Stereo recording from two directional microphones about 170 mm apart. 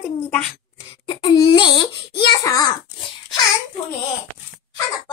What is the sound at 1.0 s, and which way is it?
Speech, 30° left (ahead or behind).